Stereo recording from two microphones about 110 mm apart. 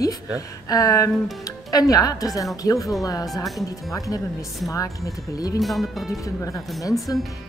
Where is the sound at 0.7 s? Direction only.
35° left (ahead or behind).